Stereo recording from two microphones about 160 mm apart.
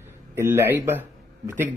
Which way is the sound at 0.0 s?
15° right (ahead or behind).